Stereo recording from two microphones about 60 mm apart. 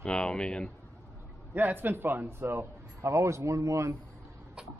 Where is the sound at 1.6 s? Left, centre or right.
Right.